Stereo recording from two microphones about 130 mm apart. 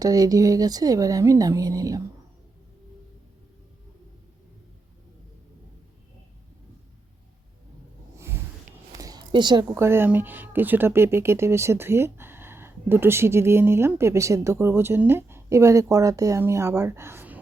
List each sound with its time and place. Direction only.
0.0 s speech: 30° right (ahead or behind)
8.9 s a sound: 25° right (ahead or behind)
9.7 s speech: 20° right (ahead or behind)